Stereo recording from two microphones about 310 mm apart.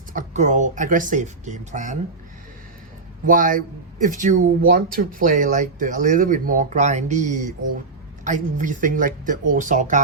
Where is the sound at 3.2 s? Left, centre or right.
Right.